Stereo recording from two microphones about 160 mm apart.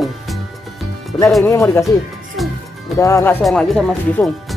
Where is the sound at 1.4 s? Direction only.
15° left (ahead or behind).